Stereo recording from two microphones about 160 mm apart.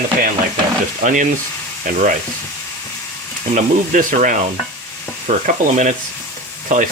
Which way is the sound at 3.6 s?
50° right (ahead or behind).